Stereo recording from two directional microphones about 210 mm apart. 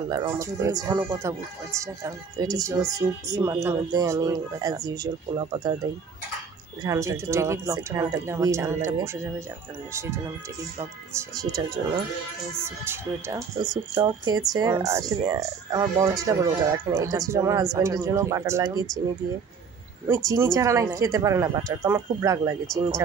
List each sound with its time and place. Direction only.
0.1 s speech: 15° right (ahead or behind)
6.8 s speech: 15° right (ahead or behind)
11.1 s speech: 15° right (ahead or behind)
20.2 s speech: 15° right (ahead or behind)